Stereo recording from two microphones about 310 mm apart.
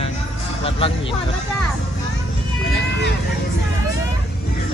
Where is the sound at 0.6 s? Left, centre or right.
Centre.